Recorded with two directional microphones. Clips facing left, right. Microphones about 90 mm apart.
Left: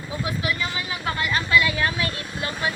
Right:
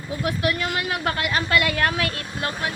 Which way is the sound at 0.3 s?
60° right (ahead or behind).